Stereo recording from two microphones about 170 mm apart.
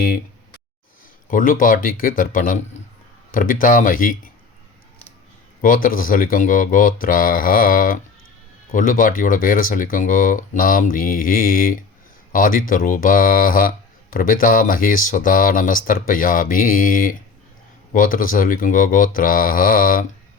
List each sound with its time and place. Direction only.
1.3 s speech: 50° left (ahead or behind)
5.6 s speech: 55° left (ahead or behind)